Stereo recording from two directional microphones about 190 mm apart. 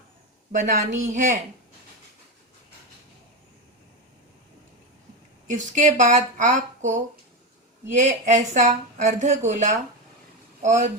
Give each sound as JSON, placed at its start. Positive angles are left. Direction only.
{"t": 0.5, "sound": "a woman's voice", "side_deg": -40}
{"t": 5.5, "sound": "a woman's voice", "side_deg": -40}